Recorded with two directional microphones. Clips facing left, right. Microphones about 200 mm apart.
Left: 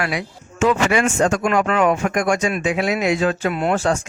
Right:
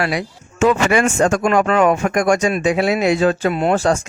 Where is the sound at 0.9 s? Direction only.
50° right (ahead or behind).